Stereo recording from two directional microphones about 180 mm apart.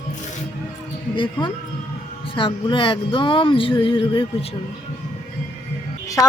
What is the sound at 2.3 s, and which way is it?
Speech, 25° left (ahead or behind).